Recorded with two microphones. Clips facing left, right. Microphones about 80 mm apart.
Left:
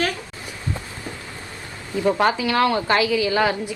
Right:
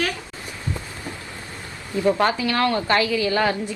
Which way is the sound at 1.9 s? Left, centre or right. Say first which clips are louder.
Even; centre.